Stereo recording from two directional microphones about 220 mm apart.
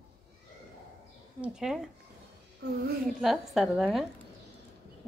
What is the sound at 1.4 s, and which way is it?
Speech, centre (ahead or behind).